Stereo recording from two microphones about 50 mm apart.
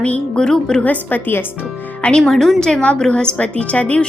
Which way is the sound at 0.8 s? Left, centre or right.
Left.